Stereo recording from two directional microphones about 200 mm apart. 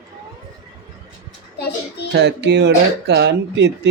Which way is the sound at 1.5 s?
55° left (ahead or behind).